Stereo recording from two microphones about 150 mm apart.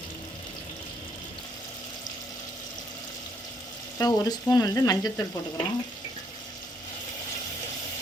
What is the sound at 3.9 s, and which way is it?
Frying, 25° left (ahead or behind).